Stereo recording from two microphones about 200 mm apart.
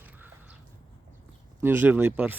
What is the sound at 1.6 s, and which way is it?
Speech, 10° right (ahead or behind).